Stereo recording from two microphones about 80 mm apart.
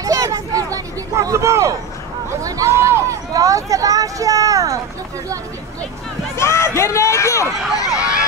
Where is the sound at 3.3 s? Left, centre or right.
Right.